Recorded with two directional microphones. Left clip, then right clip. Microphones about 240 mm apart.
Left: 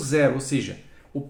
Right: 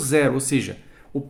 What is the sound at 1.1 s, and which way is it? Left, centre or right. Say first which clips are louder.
Beatboxing: right 4 dB; right.